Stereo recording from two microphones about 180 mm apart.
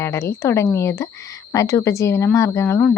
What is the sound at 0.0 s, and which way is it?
Speech, 15° left (ahead or behind).